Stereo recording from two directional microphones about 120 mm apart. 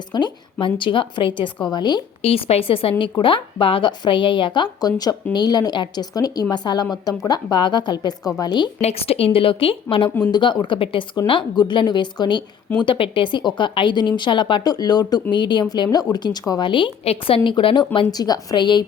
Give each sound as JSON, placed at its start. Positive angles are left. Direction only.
{"t": 0.1, "sound": "a woman's voice", "side_deg": 40}
{"t": 2.2, "sound": "a woman's voice", "side_deg": 55}
{"t": 8.8, "sound": "a woman's voice", "side_deg": 60}